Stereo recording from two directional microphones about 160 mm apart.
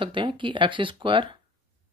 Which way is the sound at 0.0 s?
30° right (ahead or behind).